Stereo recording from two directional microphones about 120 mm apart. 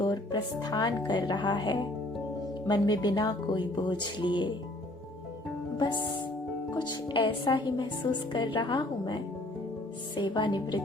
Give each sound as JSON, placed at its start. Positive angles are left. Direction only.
{"t": 0.0, "sound": "speech", "side_deg": 40}
{"t": 5.7, "sound": "speech", "side_deg": 40}